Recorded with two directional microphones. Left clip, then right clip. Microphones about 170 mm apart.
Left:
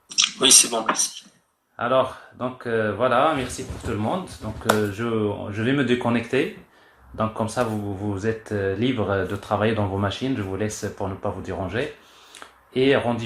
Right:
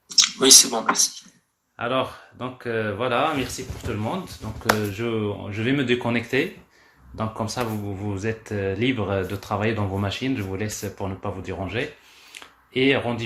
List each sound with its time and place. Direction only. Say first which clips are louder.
0.2 s speech: right 2 dB; 20° right (ahead or behind)
1.7 s speech: left 4 dB; 35° right (ahead or behind)
4.9 s speech: left 2 dB; 30° right (ahead or behind)
12.3 s a sound: even; 30° right (ahead or behind)